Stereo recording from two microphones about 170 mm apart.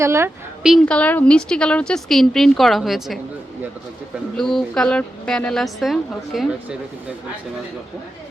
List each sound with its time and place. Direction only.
0.0 s a woman's voice: 15° right (ahead or behind)
0.6 s a woman's voice: centre (ahead or behind)
4.4 s a woman's voice: 5° left (ahead or behind)